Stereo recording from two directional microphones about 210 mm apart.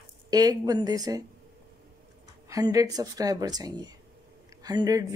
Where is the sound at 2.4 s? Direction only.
15° right (ahead or behind).